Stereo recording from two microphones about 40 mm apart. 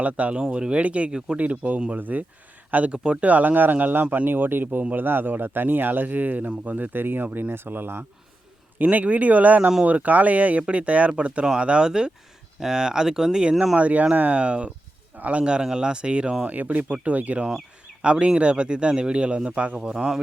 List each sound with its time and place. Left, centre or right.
0.0 s speech: right
1.4 s speech: right
2.9 s speech: right
3.2 s speech: right
4.8 s speech: right
5.0 s speech: right
8.8 s speech: right; by 13.7 s centre
13.7 s speech: right
15.7 s speech: right
16.5 s speech: right
19.8 s speech: centre